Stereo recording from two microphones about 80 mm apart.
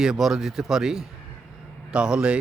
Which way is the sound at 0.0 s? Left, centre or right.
Centre.